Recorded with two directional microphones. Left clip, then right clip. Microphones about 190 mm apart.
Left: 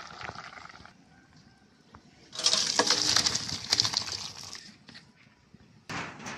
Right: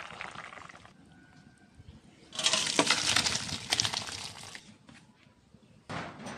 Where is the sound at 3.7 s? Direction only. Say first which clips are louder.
Left 4 dB; 30° right (ahead or behind).